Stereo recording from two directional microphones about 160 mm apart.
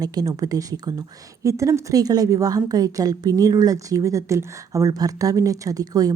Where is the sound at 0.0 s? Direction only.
25° right (ahead or behind).